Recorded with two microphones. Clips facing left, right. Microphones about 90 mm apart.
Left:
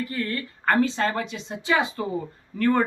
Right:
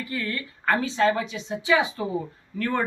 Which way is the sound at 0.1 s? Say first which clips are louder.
Left 1 dB; 40° left (ahead or behind).